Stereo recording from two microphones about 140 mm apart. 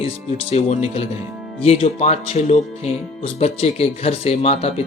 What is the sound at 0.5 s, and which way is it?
Speech, 50° left (ahead or behind).